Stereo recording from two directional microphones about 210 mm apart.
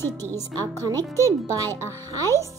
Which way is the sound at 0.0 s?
10° left (ahead or behind).